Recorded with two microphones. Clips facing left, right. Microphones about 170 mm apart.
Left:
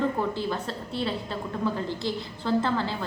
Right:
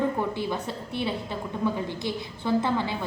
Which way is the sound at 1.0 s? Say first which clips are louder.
Even; 15° right (ahead or behind).